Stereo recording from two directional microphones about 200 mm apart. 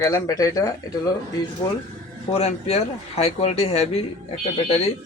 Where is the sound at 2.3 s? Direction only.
35° left (ahead or behind).